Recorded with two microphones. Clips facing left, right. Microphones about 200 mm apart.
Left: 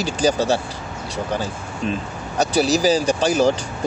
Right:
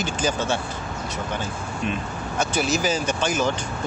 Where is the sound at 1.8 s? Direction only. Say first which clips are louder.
Left 3 dB; 35° left (ahead or behind).